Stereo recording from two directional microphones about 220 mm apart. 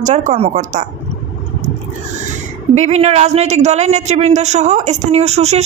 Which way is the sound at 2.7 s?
30° right (ahead or behind).